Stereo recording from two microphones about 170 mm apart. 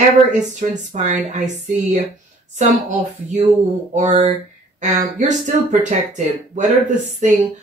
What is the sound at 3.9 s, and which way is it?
Speech, 45° right (ahead or behind).